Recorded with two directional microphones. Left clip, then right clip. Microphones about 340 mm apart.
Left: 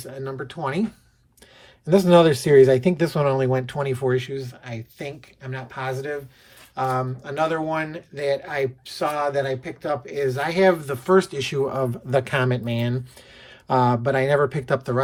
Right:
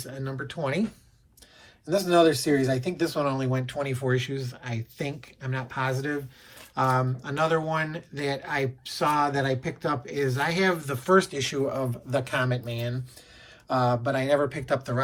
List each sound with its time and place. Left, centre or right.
0.0 s speech: centre
1.9 s speech: left